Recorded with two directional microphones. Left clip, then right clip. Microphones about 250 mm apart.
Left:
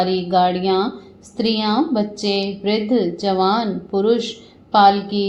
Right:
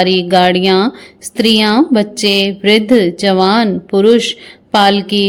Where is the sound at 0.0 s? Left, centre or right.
Right.